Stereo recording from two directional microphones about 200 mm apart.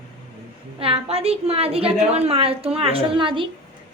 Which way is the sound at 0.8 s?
30° right (ahead or behind).